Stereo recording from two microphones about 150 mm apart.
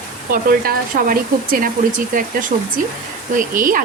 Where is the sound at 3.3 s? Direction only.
65° right (ahead or behind).